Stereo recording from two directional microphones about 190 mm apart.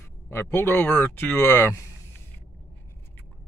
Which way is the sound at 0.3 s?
10° left (ahead or behind).